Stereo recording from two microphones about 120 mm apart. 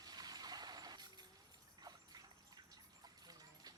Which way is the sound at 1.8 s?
35° right (ahead or behind).